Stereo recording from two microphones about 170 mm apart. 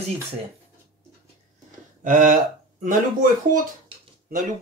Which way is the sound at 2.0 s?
50° right (ahead or behind).